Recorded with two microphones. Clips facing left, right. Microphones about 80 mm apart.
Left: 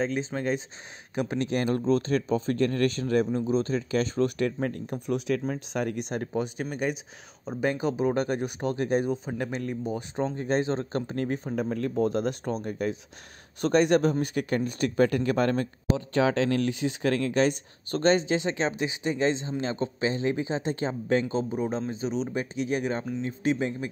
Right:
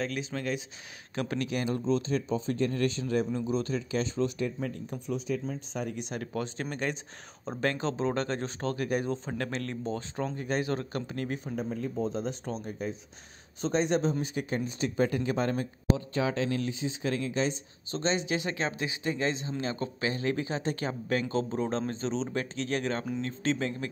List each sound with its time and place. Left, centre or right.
0.0 s speech: left
1.1 s speech: centre
1.4 s speech: left
3.3 s a man's voice: left
6.3 s speech: centre
9.1 s speech: centre
10.3 s speech: left
11.5 s speech: left
12.4 s speech: left
13.6 s a man's voice: left
18.2 s speech: left